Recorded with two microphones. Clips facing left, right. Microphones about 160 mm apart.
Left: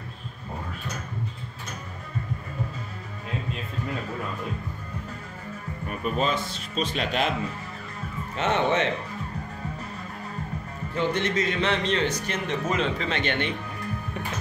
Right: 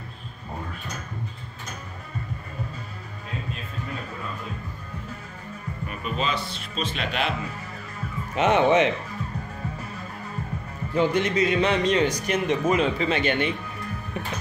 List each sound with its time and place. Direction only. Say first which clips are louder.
6.1 s speech: even; 45° left (ahead or behind)
8.4 s speech: right 5 dB; 10° right (ahead or behind)
11.0 s speech: right 4 dB; 10° right (ahead or behind)